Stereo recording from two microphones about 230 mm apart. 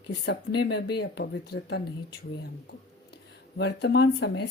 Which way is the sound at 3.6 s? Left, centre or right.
Left.